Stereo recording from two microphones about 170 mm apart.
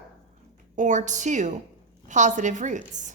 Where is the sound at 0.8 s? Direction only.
45° right (ahead or behind).